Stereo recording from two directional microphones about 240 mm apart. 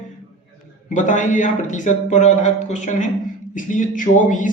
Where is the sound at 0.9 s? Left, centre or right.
Left.